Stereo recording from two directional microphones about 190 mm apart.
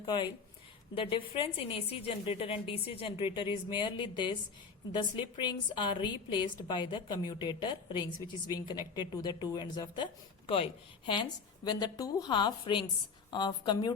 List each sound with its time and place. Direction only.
0.0 s a woman's voice: 25° left (ahead or behind)